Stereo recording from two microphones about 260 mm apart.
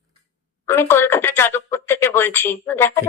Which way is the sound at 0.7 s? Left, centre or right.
Centre.